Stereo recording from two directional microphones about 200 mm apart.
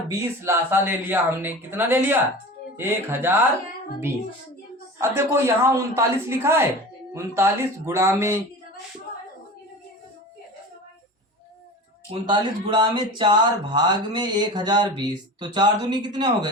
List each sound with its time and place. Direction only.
0.1 s a woman's voice: 15° right (ahead or behind)
4.9 s a woman's voice: 15° right (ahead or behind)
12.3 s speech: 20° right (ahead or behind)